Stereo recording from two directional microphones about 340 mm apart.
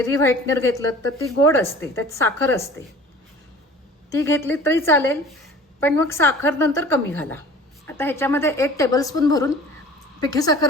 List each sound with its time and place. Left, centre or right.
0.0 s a woman's voice: centre
4.1 s a woman's voice: centre